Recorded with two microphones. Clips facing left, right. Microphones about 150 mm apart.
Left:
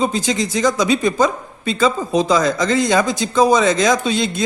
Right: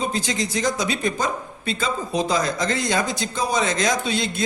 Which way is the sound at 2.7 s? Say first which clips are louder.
Left 7 dB; 90° left.